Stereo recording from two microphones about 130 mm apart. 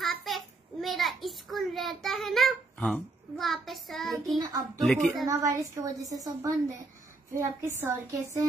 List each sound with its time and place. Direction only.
0.0 s a sound: centre (ahead or behind)
4.3 s a child's voice: 30° right (ahead or behind)
4.8 s a woman's voice: centre (ahead or behind)
5.2 s a woman's voice: 25° right (ahead or behind)